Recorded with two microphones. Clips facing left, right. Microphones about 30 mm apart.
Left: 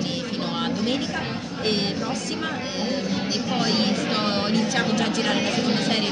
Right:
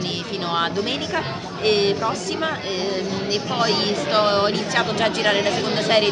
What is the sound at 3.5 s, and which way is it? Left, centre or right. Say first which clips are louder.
A woman's voice: right 2 dB; right.